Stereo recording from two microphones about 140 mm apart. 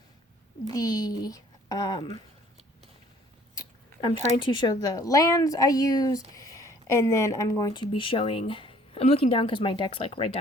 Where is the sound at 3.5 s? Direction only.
30° left (ahead or behind).